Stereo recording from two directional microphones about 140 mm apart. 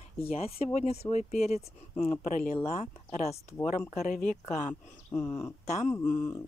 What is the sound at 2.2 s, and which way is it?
Speech, 65° left (ahead or behind).